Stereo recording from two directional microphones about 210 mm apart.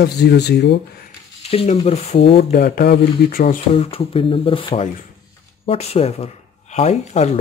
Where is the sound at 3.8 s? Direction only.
25° left (ahead or behind).